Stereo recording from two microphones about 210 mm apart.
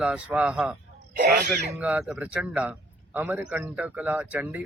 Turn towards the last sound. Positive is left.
turn(degrees=-5)  # may be behind; listen again after turning